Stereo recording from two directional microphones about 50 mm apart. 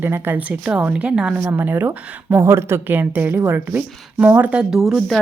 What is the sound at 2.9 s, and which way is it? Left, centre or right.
Speech, right.